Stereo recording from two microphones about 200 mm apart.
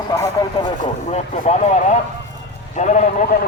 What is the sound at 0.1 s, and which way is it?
Speech, 20° left (ahead or behind).